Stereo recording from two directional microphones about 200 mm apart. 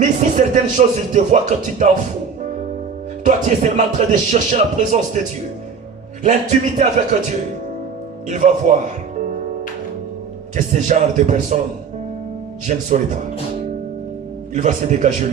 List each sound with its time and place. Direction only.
0.0 s a man's voice: 40° right (ahead or behind)
3.2 s a man's voice: 35° right (ahead or behind)
6.2 s a man's voice: 35° right (ahead or behind)
10.5 s a man's voice: 40° right (ahead or behind)
12.6 s a man's voice: 40° right (ahead or behind)
14.5 s a man's voice: 40° right (ahead or behind)